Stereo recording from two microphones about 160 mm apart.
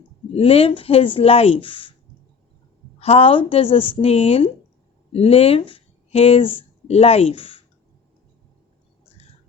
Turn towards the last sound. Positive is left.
turn(degrees=35)  # may be behind; listen again after turning